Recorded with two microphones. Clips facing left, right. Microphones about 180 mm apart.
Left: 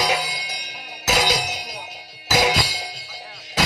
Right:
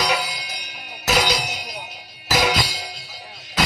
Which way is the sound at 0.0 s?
40° left (ahead or behind).